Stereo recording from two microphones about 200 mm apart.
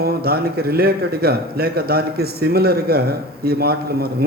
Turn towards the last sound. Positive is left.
turn(degrees=-50)  # may be behind; listen again after turning